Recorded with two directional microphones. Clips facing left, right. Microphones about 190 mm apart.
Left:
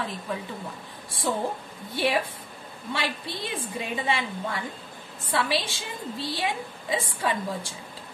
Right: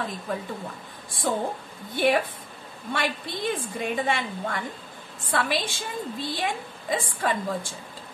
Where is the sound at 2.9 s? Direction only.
50° right (ahead or behind).